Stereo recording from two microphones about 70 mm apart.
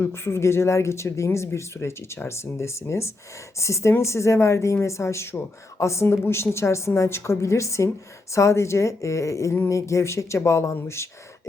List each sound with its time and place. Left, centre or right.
0.0 s a woman's voice: left